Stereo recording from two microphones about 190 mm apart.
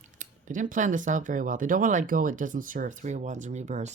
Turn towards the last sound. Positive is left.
turn(degrees=-40)  # may be behind; listen again after turning